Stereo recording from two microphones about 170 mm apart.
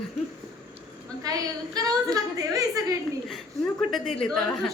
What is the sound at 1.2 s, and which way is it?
A woman's voice, 20° right (ahead or behind).